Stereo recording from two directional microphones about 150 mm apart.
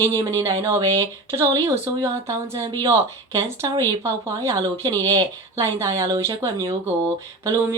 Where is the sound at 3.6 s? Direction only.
30° right (ahead or behind).